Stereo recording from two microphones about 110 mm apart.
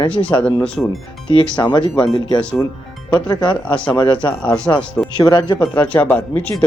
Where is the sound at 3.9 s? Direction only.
45° left (ahead or behind).